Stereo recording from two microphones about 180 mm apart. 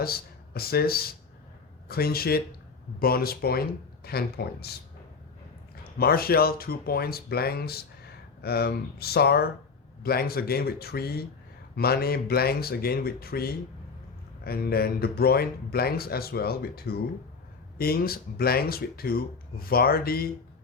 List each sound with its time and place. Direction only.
0.0 s speech: 60° left (ahead or behind)
6.0 s speech: 55° left (ahead or behind)